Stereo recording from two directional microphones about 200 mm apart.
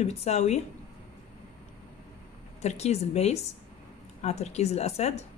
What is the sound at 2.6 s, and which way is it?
Speech, 30° left (ahead or behind).